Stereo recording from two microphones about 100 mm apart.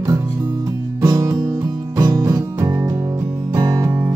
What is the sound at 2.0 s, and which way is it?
Music, 35° right (ahead or behind).